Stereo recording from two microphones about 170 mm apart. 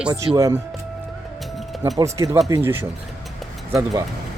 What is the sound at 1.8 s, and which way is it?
Speech, 20° right (ahead or behind).